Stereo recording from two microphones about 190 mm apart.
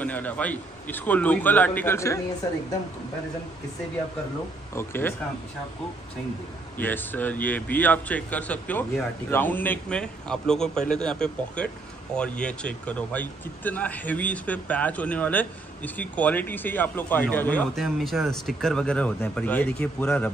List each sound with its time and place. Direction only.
0.0 s speech: 10° left (ahead or behind)
4.7 s speech: 10° left (ahead or behind)
6.8 s speech: 10° left (ahead or behind)